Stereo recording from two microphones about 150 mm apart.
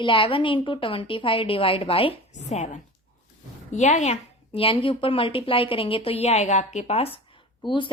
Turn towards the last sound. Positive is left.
turn(degrees=35)  # may be behind; listen again after turning